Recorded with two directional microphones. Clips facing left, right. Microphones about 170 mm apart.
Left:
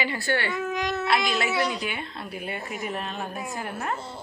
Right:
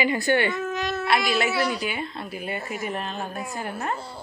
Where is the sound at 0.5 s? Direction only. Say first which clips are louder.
Right 1 dB; 10° left (ahead or behind).